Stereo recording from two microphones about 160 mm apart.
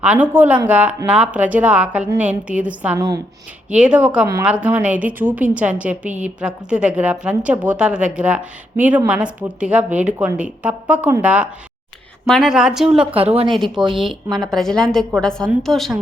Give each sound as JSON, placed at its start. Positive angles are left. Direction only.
{"t": 0.0, "sound": "a woman's voice", "side_deg": -10}
{"t": 13.1, "sound": "a woman's voice", "side_deg": -35}
{"t": 13.5, "sound": "a woman's voice", "side_deg": 0}